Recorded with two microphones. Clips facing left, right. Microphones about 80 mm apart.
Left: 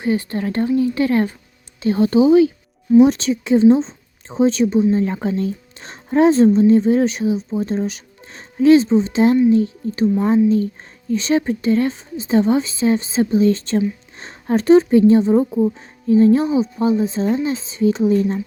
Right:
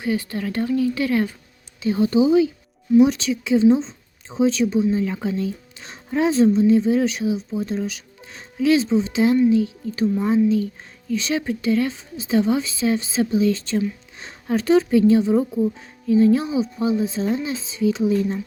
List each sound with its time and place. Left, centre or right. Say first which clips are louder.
0.0 s a woman's voice: left 4 dB; left
1.8 s speech: left 3 dB; left
3.0 s a woman's voice: left 3 dB; left
4.9 s a woman's voice: left 4 dB; left
7.0 s a woman's voice: left 3 dB; left